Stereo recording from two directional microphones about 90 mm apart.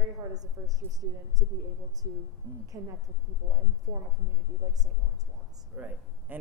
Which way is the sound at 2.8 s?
30° right (ahead or behind).